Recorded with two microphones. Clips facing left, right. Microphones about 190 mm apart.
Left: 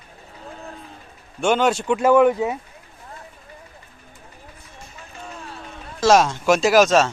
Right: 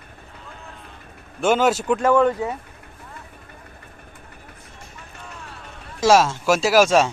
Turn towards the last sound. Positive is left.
turn(degrees=-10)  # may be behind; listen again after turning